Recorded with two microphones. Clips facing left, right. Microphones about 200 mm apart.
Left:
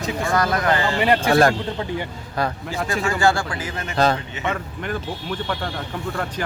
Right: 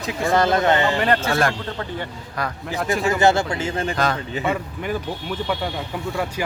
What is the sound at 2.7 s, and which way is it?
Speech, centre (ahead or behind).